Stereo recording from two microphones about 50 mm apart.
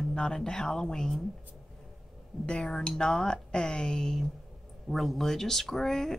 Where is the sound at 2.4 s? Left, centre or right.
Centre.